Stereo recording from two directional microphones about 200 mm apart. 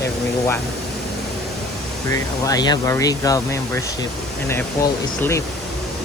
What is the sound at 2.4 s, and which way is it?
Speech, 20° left (ahead or behind).